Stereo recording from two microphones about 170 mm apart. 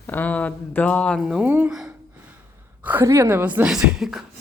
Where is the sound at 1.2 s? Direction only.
5° right (ahead or behind).